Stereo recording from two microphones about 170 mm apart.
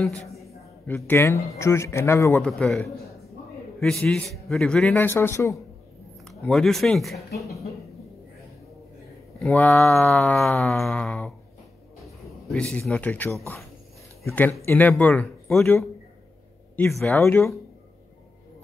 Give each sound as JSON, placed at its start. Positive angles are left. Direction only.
{"t": 0.8, "sound": "a man's voice", "side_deg": 15}
{"t": 3.8, "sound": "a man's voice", "side_deg": 5}
{"t": 6.2, "sound": "speech", "side_deg": 0}
{"t": 9.4, "sound": "a man's voice", "side_deg": 10}
{"t": 12.4, "sound": "a man's voice", "side_deg": 5}
{"t": 17.0, "sound": "a man's voice", "side_deg": 10}